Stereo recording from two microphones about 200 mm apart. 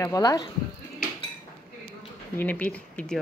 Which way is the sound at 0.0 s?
15° left (ahead or behind).